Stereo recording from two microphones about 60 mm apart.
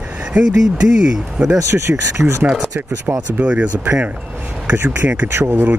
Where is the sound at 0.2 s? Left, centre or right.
Centre.